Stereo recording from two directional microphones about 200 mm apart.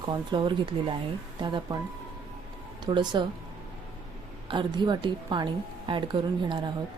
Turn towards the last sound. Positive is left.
turn(degrees=-25)  # may be behind; listen again after turning